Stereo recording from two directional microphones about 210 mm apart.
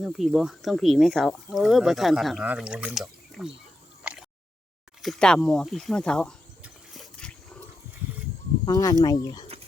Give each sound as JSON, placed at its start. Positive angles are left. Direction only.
{"t": 0.0, "sound": "speech", "side_deg": 0}
{"t": 4.0, "sound": "a sound", "side_deg": -5}
{"t": 5.0, "sound": "cricket", "side_deg": 0}
{"t": 8.6, "sound": "speech", "side_deg": 15}